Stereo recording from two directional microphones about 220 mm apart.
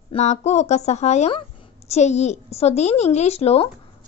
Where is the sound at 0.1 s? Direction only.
30° left (ahead or behind).